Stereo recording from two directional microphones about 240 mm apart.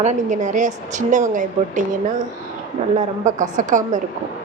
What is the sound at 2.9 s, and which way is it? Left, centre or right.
Speech, right.